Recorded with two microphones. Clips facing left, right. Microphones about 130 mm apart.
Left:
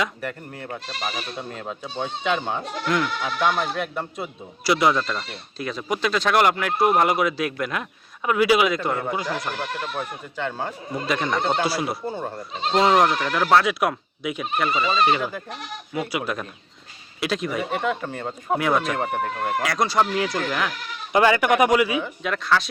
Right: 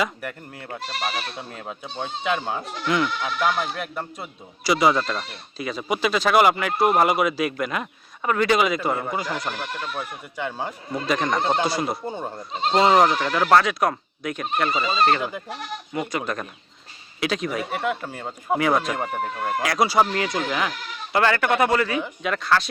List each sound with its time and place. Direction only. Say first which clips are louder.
0.0 s speech: even; 5° right (ahead or behind)
10.3 s speech: left 1 dB; 15° right (ahead or behind)
10.9 s speech: right 1 dB; centre (ahead or behind)
12.0 s speech: left 1 dB; 20° right (ahead or behind)
12.4 s speech: right 1 dB; centre (ahead or behind)
15.2 s speech: even; 15° right (ahead or behind)
15.9 s speech: left 1 dB; 5° left (ahead or behind)
21.1 s speech: left 3 dB; 15° left (ahead or behind)
22.2 s speech: right 2 dB; centre (ahead or behind)